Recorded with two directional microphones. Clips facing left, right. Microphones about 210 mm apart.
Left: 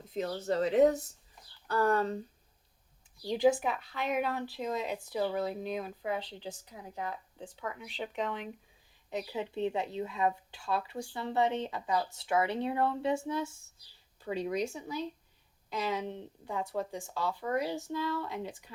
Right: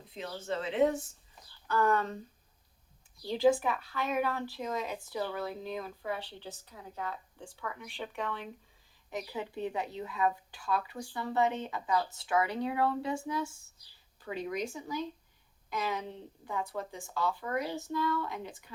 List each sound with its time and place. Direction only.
0.1 s speech: 45° left (ahead or behind)
3.2 s a woman's voice: 15° left (ahead or behind)
16.5 s speech: 20° left (ahead or behind)